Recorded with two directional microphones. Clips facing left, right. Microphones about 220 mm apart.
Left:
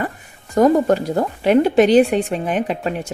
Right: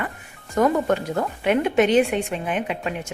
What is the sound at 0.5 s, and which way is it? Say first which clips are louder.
Speech: left 6 dB; 35° left (ahead or behind).